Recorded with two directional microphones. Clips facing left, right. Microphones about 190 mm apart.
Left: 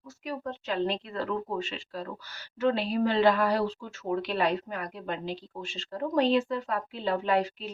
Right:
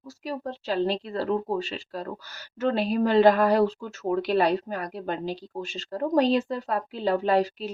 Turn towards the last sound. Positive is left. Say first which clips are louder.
# right 4 dB
turn(degrees=-35)  # may be behind; listen again after turning